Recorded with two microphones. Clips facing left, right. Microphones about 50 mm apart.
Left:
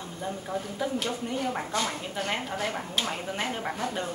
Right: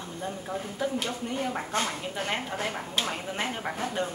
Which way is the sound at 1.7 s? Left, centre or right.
Right.